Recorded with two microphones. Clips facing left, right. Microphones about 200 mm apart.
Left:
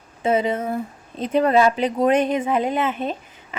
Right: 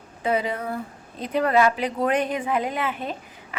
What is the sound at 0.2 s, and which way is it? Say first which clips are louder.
A woman's voice: left 4 dB; 25° left (ahead or behind).